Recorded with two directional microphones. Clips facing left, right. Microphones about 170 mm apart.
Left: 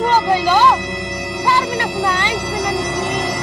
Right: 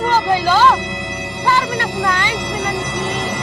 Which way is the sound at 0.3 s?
15° left (ahead or behind).